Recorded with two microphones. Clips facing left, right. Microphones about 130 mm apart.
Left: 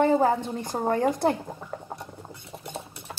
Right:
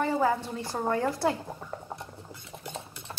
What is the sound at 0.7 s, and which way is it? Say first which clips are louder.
Speech: left 3 dB; 30° left (ahead or behind).